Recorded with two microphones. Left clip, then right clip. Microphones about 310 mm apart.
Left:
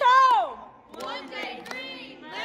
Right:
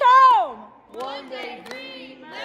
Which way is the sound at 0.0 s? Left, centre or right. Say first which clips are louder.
Right 5 dB; right.